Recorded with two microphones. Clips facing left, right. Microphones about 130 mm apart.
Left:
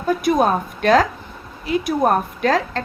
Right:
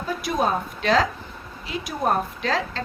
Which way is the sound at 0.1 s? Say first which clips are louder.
Left 7 dB; 55° left (ahead or behind).